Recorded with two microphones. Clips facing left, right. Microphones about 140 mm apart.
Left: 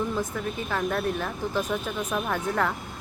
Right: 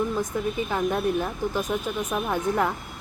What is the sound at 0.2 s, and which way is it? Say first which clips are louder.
Speech: right 3 dB; 15° right (ahead or behind).